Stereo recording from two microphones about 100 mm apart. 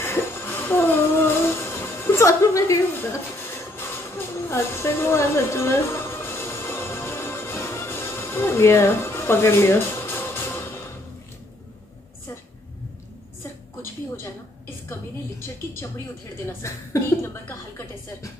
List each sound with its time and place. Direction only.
0.0 s music: 25° left (ahead or behind)
4.5 s music: 25° left (ahead or behind)
14.9 s a sound: 30° left (ahead or behind)
16.6 s a woman's voice: 30° left (ahead or behind)